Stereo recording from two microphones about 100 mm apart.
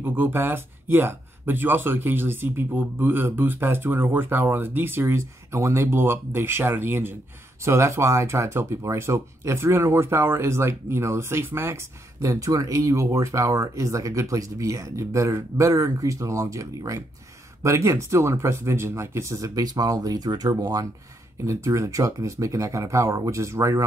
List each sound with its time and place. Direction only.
0.0 s speech: 20° right (ahead or behind)